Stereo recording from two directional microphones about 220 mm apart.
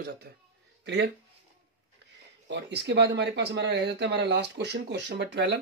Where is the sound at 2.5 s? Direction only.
50° right (ahead or behind).